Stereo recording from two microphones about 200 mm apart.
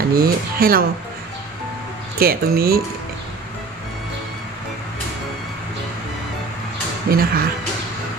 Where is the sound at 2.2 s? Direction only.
50° right (ahead or behind).